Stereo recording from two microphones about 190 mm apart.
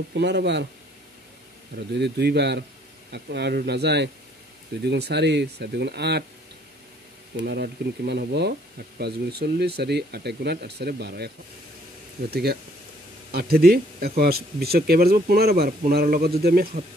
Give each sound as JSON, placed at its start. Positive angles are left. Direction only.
{"t": 0.1, "sound": "speech", "side_deg": -65}
{"t": 2.0, "sound": "speech", "side_deg": -60}
{"t": 7.3, "sound": "speech", "side_deg": -60}